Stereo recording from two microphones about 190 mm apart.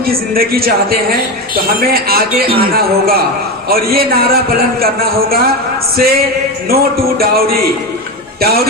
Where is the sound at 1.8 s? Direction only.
50° right (ahead or behind).